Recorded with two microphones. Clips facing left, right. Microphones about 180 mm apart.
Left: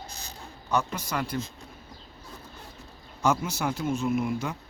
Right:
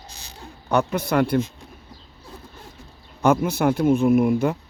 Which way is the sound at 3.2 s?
60° right (ahead or behind).